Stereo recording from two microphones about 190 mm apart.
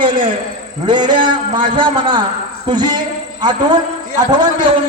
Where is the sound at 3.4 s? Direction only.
20° right (ahead or behind).